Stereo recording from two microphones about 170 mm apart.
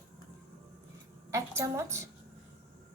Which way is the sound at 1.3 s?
15° right (ahead or behind).